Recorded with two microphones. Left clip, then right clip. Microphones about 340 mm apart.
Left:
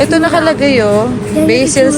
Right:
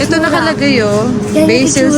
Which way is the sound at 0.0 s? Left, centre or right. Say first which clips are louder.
Left 2 dB; centre.